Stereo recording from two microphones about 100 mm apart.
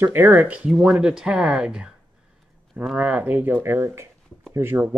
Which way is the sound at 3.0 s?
15° right (ahead or behind).